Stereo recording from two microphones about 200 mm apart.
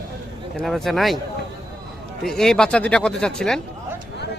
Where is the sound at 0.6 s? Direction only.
Centre (ahead or behind).